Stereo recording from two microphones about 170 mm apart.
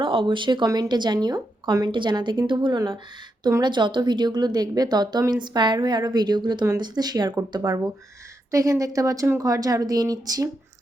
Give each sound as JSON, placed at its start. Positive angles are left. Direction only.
{"t": 0.0, "sound": "a woman's voice", "side_deg": -30}